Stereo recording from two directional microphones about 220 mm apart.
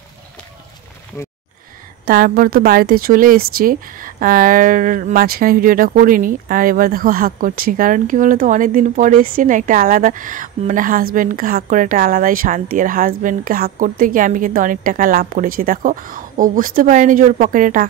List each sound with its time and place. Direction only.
2.0 s speech: 40° right (ahead or behind)